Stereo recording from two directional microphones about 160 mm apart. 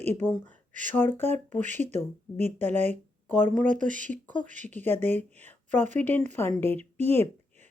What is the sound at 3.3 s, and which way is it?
Speech, 10° left (ahead or behind).